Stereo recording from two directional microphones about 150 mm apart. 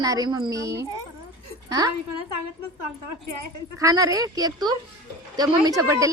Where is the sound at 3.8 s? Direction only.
20° right (ahead or behind).